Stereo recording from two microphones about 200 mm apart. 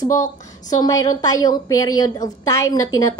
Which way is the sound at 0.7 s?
15° left (ahead or behind).